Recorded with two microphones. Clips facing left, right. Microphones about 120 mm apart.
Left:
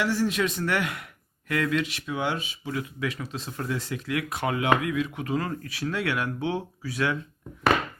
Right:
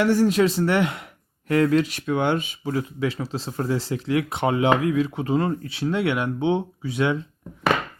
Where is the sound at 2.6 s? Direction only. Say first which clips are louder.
Right 5 dB; 30° right (ahead or behind).